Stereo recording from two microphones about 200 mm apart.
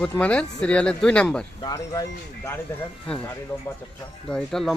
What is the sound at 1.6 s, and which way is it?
Speech, 20° left (ahead or behind).